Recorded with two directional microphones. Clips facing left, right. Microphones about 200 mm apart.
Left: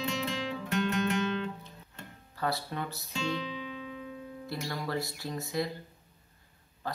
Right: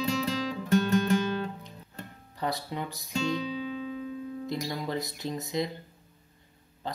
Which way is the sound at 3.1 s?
40° right (ahead or behind).